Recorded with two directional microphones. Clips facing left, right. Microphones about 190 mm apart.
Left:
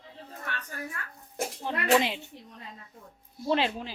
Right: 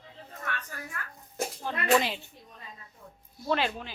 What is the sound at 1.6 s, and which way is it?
Speech, 20° left (ahead or behind).